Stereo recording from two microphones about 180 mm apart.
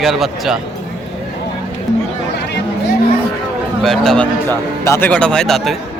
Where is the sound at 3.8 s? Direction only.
Centre (ahead or behind).